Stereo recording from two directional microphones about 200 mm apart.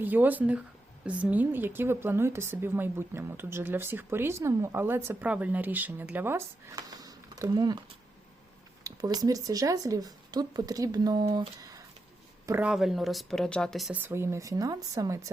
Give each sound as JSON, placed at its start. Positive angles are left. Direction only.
{"t": 0.0, "sound": "a woman's voice", "side_deg": -10}
{"t": 12.5, "sound": "a woman's voice", "side_deg": -5}